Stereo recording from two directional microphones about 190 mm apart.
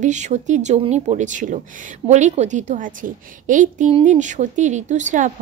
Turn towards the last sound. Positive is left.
turn(degrees=-40)  # may be behind; listen again after turning